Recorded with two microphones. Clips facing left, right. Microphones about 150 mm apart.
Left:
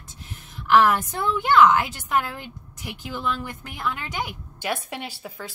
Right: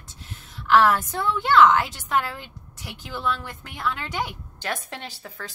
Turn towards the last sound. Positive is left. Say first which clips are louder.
# left 2 dB
turn(degrees=10)  # may be behind; listen again after turning